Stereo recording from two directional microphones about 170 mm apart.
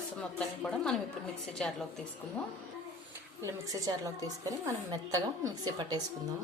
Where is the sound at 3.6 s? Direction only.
20° right (ahead or behind).